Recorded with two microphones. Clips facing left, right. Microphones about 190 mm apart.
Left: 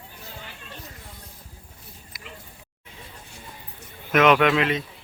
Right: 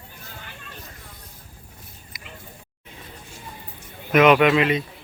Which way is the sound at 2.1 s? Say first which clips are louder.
Left 1 dB; centre (ahead or behind).